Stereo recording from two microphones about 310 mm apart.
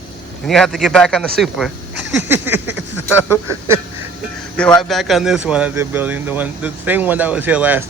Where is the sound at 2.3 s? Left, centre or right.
Centre.